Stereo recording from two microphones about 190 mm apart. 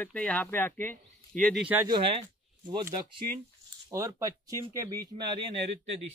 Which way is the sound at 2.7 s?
25° right (ahead or behind).